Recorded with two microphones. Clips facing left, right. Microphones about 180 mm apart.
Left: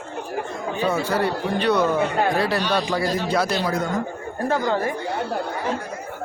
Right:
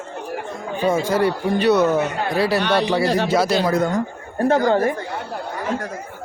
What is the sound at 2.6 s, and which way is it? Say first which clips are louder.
Speech: right 4 dB; 65° right (ahead or behind).